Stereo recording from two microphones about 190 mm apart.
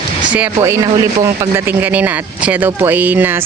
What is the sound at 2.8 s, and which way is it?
Speech, 10° right (ahead or behind).